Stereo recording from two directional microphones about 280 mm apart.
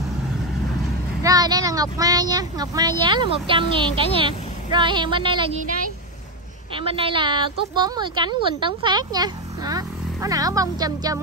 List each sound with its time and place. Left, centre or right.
1.2 s a woman's voice: centre
6.7 s a woman's voice: centre